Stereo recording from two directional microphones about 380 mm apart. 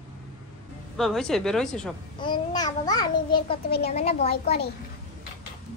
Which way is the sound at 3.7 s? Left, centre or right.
Left.